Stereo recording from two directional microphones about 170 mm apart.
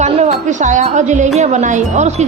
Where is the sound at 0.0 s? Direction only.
45° right (ahead or behind).